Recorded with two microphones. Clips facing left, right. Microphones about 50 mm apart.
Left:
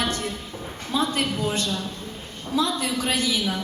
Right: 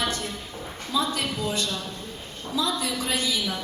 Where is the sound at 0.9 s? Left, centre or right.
Left.